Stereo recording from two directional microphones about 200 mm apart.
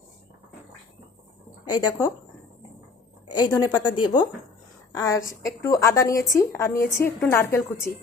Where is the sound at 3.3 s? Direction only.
20° left (ahead or behind).